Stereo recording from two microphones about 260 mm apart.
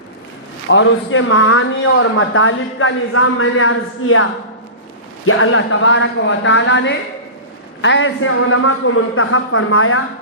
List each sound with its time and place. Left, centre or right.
0.7 s speech: left